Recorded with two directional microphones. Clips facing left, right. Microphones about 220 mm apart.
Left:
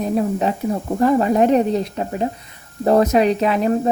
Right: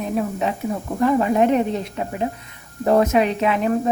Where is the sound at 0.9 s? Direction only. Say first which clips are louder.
Left 2 dB; 40° left (ahead or behind).